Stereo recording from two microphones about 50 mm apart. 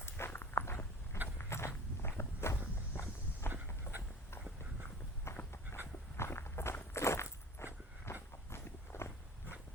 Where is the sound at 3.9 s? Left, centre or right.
Left.